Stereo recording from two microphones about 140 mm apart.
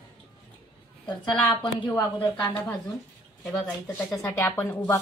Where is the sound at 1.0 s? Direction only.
35° left (ahead or behind).